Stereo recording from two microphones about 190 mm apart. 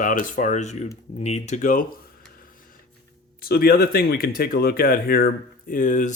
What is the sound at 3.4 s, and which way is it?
Speech, 55° left (ahead or behind).